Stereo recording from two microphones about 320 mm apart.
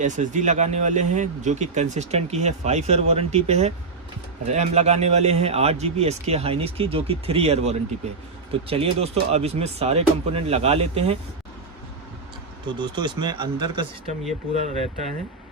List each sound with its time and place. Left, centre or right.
0.0 s speech: right
12.6 s speech: centre